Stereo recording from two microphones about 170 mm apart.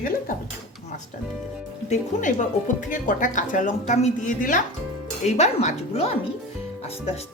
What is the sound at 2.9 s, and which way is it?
A woman's voice, 50° left (ahead or behind).